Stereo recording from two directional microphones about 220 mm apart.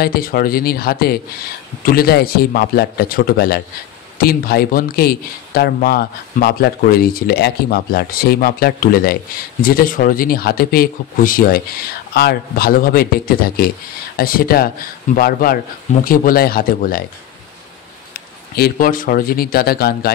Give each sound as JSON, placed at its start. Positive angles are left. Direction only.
{"t": 0.0, "sound": "a man's voice", "side_deg": 45}
{"t": 18.6, "sound": "a man's voice", "side_deg": 40}